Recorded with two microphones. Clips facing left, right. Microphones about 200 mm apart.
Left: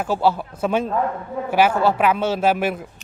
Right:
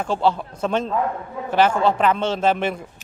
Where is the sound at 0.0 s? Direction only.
5° left (ahead or behind).